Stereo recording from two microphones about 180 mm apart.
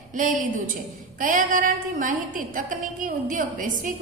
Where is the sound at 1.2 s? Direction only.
45° right (ahead or behind).